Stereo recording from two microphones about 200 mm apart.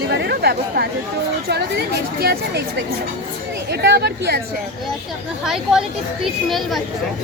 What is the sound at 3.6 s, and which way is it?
Speech, 55° right (ahead or behind).